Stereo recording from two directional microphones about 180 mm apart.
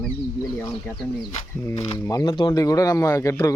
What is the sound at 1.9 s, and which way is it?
Speech, 20° left (ahead or behind).